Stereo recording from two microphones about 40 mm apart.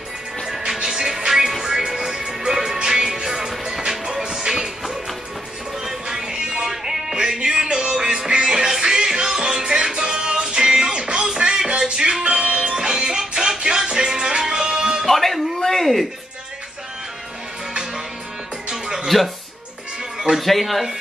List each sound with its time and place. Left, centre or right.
0.8 s music: centre
15.0 s a sound: centre
18.7 s music: centre
19.0 s music: centre
20.2 s a sound: centre
20.4 s speech: centre